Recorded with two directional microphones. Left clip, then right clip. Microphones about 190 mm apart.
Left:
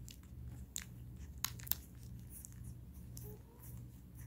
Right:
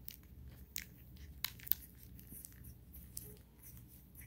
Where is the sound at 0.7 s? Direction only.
25° left (ahead or behind).